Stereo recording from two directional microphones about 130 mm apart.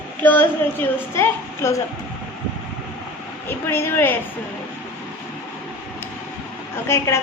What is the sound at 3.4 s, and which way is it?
Speech, 15° left (ahead or behind).